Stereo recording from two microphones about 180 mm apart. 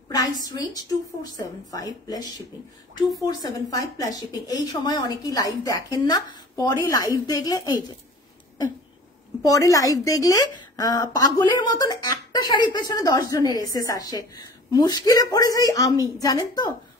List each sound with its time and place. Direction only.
0.1 s a woman's voice: 20° left (ahead or behind)
9.4 s a woman's voice: 20° left (ahead or behind)